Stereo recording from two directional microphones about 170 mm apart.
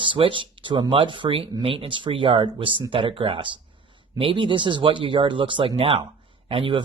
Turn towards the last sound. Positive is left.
turn(degrees=-30)  # may be behind; listen again after turning